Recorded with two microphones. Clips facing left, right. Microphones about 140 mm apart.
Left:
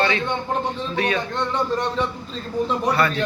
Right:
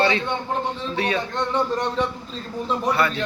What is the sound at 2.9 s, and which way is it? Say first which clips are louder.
Speech: right 1 dB; 25° right (ahead or behind).